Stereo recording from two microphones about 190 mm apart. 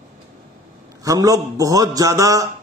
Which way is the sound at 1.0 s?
20° right (ahead or behind).